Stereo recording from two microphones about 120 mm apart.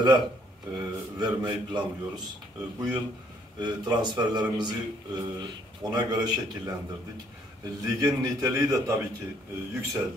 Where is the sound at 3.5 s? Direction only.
35° right (ahead or behind).